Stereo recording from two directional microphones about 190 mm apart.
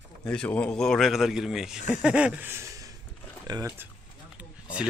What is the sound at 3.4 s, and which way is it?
Speech, 15° right (ahead or behind).